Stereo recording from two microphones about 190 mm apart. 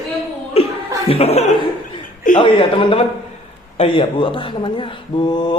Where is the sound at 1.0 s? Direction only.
30° left (ahead or behind).